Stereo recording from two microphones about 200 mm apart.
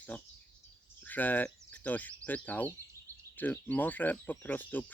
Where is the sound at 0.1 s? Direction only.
5° left (ahead or behind).